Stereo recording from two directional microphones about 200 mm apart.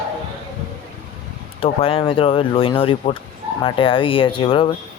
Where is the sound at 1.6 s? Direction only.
25° left (ahead or behind).